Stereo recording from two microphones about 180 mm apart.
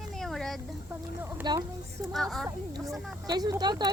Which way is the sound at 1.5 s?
25° right (ahead or behind).